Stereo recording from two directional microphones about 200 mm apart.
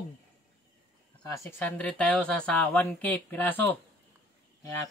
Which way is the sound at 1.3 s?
10° left (ahead or behind).